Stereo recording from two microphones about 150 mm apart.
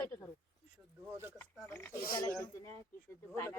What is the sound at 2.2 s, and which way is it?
Speech, 20° left (ahead or behind).